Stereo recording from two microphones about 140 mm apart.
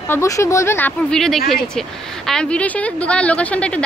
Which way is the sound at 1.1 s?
5° left (ahead or behind).